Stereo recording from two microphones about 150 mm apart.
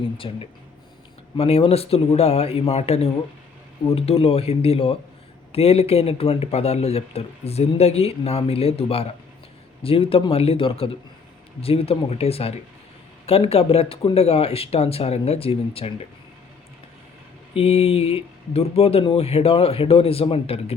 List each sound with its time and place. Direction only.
0.2 s speech: 35° left (ahead or behind)
17.5 s speech: 40° left (ahead or behind)